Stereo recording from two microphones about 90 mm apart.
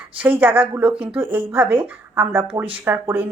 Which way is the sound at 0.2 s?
20° right (ahead or behind).